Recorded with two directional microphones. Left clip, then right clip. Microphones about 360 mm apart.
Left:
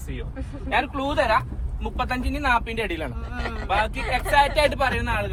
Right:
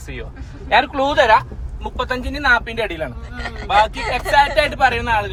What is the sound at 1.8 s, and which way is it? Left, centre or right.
Speech, centre.